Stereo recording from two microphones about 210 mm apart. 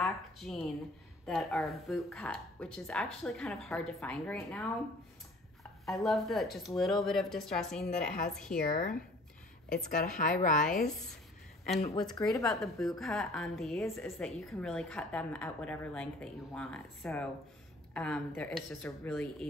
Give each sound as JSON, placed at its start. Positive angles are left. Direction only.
{"t": 0.0, "sound": "a woman's voice", "side_deg": 0}
{"t": 9.8, "sound": "a woman's voice", "side_deg": 40}
{"t": 12.4, "sound": "a woman's voice", "side_deg": 0}